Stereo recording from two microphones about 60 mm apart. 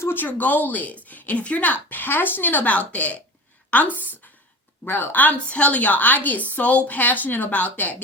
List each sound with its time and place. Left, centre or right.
0.1 s a woman's voice: left